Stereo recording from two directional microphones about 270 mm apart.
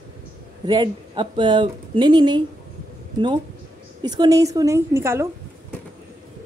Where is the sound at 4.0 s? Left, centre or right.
Centre.